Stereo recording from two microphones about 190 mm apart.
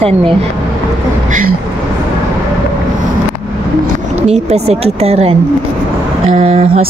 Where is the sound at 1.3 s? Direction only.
45° right (ahead or behind).